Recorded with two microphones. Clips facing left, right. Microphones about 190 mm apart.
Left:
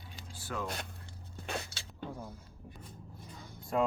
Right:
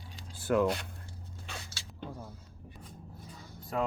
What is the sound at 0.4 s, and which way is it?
Speech, 60° right (ahead or behind).